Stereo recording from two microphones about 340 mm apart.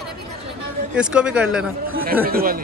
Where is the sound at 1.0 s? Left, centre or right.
Centre.